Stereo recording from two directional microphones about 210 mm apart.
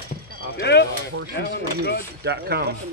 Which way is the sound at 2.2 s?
50° right (ahead or behind).